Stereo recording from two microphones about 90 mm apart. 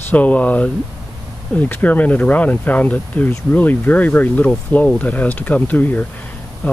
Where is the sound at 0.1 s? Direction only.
15° left (ahead or behind).